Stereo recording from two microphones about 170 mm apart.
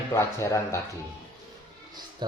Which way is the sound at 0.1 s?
15° left (ahead or behind).